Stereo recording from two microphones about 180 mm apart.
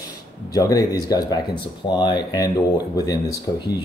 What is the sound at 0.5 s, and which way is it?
Speech, 20° left (ahead or behind).